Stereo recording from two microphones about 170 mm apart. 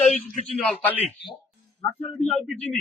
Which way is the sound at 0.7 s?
10° left (ahead or behind).